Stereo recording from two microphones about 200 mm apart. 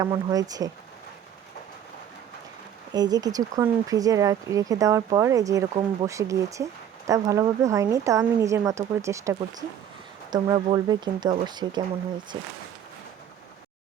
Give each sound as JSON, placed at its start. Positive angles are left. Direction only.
{"t": 0.0, "sound": "speech", "side_deg": -15}
{"t": 2.9, "sound": "speech", "side_deg": -20}